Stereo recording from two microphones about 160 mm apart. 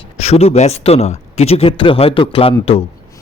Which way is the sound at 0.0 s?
40° left (ahead or behind).